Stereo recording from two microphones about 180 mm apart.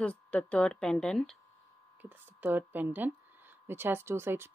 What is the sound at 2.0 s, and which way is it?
Speech, 10° right (ahead or behind).